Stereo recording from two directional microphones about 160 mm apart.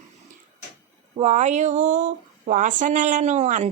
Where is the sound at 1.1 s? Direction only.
40° right (ahead or behind).